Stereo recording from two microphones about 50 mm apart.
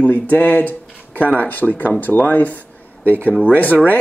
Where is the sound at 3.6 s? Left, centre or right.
Left.